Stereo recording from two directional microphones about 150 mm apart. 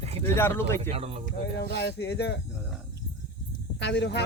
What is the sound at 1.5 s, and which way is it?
Speech, 90° left.